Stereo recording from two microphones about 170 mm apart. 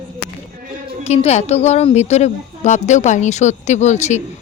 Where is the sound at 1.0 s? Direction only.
40° left (ahead or behind).